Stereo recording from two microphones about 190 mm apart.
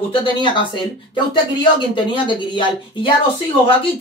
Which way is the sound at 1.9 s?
25° left (ahead or behind).